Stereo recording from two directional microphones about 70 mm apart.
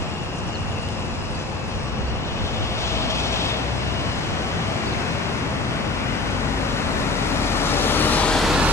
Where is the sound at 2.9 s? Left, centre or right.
Left.